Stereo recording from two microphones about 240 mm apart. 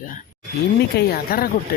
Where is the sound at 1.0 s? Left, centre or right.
Left.